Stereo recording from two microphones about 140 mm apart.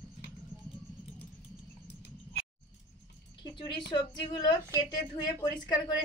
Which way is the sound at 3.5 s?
30° left (ahead or behind).